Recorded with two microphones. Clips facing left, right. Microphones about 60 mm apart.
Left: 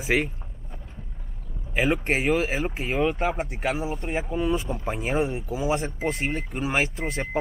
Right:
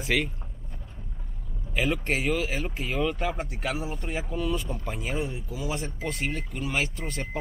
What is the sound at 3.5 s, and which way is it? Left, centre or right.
Speech, left.